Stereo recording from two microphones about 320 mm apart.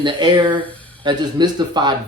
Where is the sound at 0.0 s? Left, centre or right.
Centre.